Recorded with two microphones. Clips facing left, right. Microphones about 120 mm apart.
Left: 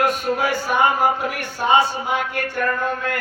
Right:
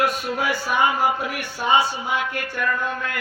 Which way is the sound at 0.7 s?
45° left (ahead or behind).